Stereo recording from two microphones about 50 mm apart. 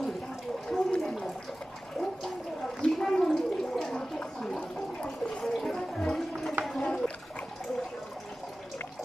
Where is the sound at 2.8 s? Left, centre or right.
Centre.